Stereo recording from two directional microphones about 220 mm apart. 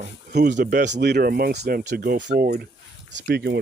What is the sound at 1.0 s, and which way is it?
Speech, 45° right (ahead or behind).